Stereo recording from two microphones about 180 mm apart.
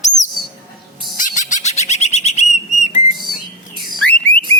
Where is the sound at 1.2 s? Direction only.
45° left (ahead or behind).